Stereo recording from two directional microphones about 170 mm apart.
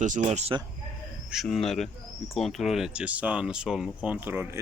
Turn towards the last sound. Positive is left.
turn(degrees=-10)  # may be behind; listen again after turning